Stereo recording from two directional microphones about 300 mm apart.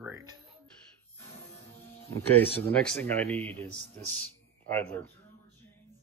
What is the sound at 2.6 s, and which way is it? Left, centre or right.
Speech, centre.